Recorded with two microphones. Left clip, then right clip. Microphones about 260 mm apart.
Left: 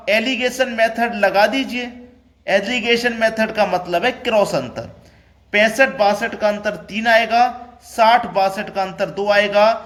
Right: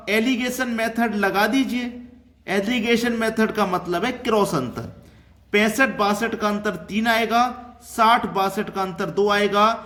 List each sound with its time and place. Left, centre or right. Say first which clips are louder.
0.0 s a man's voice: left 5 dB; centre